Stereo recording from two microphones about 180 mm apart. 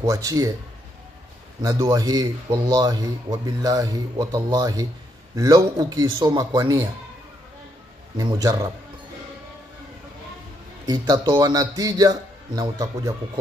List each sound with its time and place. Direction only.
0.0 s a man's voice: 20° right (ahead or behind)
1.6 s a man's voice: 20° right (ahead or behind)
8.2 s a man's voice: 20° right (ahead or behind)
10.9 s a man's voice: 20° right (ahead or behind)